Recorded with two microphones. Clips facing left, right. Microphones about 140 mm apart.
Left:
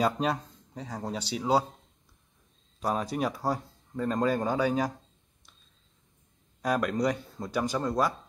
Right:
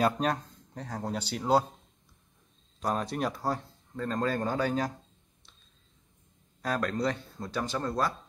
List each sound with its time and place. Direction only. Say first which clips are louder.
0.0 s speech: even; centre (ahead or behind)
2.8 s speech: left 1 dB; 5° left (ahead or behind)
6.6 s speech: left 3 dB; 10° left (ahead or behind)